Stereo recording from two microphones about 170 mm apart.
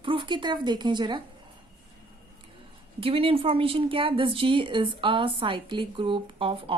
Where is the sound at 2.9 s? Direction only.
35° right (ahead or behind).